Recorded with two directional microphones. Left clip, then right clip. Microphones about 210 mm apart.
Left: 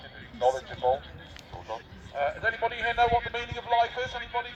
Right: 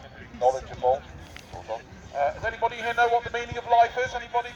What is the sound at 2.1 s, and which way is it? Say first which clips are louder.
A man's voice: right 2 dB; 50° right (ahead or behind).